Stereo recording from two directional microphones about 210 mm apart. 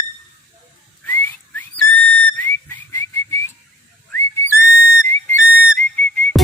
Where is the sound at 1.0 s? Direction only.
10° left (ahead or behind).